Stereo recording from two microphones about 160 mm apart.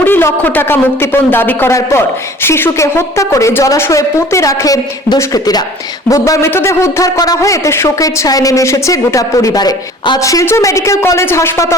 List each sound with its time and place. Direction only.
0.0 s a man's voice: 15° left (ahead or behind)